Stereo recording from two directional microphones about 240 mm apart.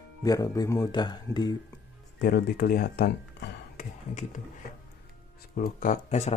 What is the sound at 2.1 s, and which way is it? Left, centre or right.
Speech, left.